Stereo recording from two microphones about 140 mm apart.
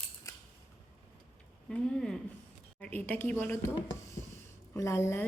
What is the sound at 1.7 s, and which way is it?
A woman's voice, 5° left (ahead or behind).